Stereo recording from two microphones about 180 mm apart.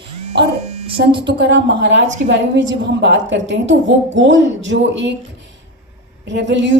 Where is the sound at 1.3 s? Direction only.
85° right.